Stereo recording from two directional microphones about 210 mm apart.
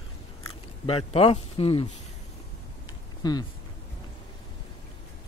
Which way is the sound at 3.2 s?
20° left (ahead or behind).